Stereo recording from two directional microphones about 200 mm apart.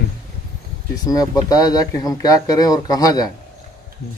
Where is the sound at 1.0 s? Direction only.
20° left (ahead or behind).